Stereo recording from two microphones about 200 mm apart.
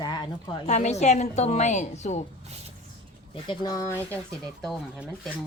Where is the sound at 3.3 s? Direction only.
20° left (ahead or behind).